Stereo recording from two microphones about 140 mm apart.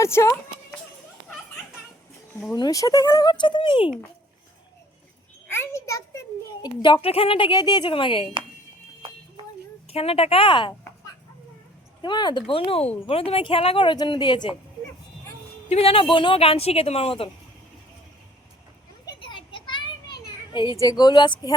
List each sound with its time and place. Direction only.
0.0 s speech: 20° left (ahead or behind)
2.5 s speech: 25° left (ahead or behind)
5.5 s a child's voice: 20° left (ahead or behind); by 8.3 s 40° left (ahead or behind)
9.9 s a woman's voice: 45° left (ahead or behind)
15.7 s speech: 40° left (ahead or behind)
19.2 s a sound: 35° left (ahead or behind)
20.7 s speech: 25° left (ahead or behind)